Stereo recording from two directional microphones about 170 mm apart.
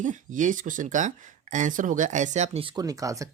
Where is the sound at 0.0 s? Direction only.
45° right (ahead or behind).